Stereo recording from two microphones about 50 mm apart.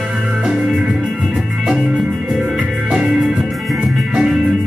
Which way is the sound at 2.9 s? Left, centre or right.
Centre.